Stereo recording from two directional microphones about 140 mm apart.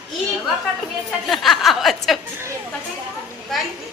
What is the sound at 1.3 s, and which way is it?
Chuckle, centre (ahead or behind).